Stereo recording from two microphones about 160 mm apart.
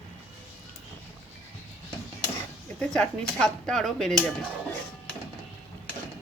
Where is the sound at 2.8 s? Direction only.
5° left (ahead or behind).